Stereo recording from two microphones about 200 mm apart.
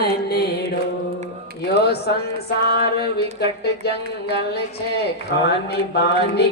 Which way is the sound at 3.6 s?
55° left (ahead or behind).